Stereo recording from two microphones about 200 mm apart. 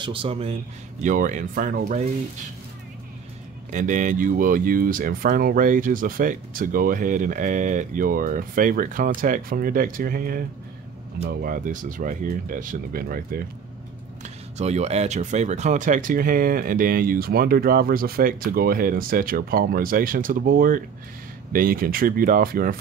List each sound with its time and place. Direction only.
0.0 s speech: 25° right (ahead or behind)
1.0 s speech: 40° right (ahead or behind)
3.7 s speech: 40° right (ahead or behind)
14.2 s speech: 35° right (ahead or behind)